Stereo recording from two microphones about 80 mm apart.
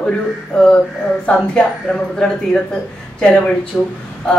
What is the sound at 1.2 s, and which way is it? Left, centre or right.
Speech, centre.